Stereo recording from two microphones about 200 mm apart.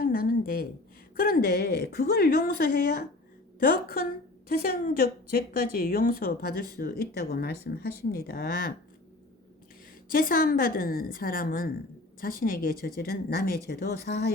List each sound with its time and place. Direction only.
0.0 s a sound: 45° left (ahead or behind)
1.1 s a woman's voice: 50° left (ahead or behind)
10.1 s a woman's voice: 45° left (ahead or behind)